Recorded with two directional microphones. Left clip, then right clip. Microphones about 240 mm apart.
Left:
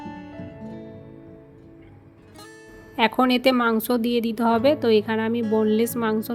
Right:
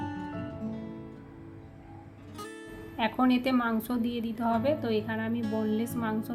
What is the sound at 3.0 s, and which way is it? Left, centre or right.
A woman's voice, left.